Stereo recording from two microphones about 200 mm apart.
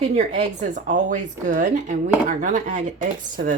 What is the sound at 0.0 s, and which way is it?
Speech, 35° right (ahead or behind).